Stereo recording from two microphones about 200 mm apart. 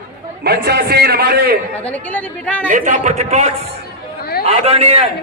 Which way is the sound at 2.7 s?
40° right (ahead or behind).